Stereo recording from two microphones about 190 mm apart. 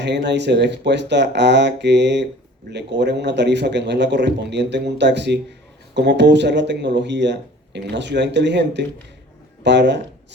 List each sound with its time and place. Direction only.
0.0 s speech: 65° right (ahead or behind)